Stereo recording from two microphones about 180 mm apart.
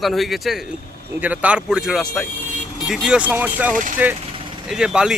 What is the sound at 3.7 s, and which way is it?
Speech, 45° right (ahead or behind).